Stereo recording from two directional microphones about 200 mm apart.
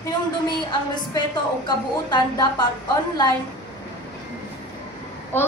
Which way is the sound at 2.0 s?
20° left (ahead or behind).